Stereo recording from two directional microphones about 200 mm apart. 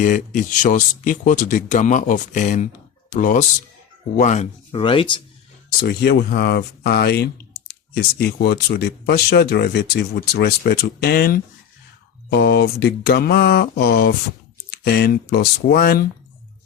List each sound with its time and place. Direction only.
0.0 s speech: 40° left (ahead or behind); by 5.2 s 25° left (ahead or behind)
5.8 s speech: 50° left (ahead or behind)